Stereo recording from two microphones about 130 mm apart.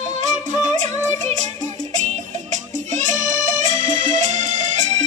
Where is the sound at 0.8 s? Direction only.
65° right (ahead or behind).